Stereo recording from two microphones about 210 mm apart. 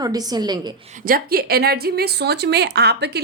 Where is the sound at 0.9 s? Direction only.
40° right (ahead or behind).